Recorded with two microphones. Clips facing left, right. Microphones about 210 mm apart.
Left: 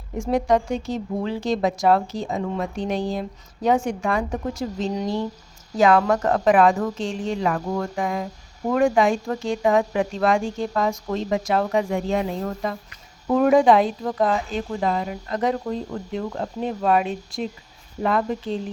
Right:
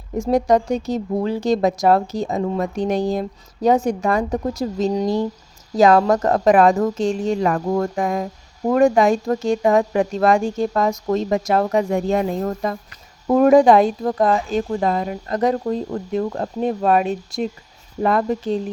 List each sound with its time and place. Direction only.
0.2 s a woman's voice: 40° right (ahead or behind)